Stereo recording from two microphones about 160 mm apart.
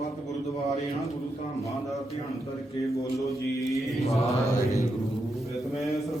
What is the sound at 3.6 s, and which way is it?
Mantra, centre (ahead or behind).